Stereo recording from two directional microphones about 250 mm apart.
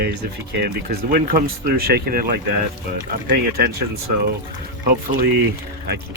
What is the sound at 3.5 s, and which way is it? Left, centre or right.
Speech, right.